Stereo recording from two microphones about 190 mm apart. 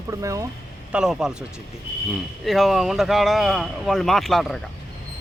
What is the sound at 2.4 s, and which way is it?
Speech, centre (ahead or behind).